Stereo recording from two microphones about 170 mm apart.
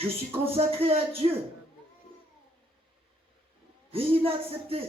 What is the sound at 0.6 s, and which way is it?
Speech, 35° right (ahead or behind).